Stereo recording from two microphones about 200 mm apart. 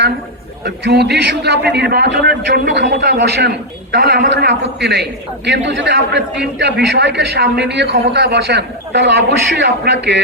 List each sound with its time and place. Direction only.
0.6 s a man's voice: 55° right (ahead or behind)